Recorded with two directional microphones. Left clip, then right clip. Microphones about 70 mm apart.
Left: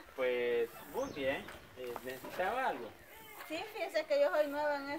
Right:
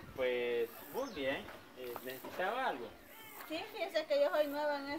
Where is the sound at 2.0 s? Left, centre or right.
Centre.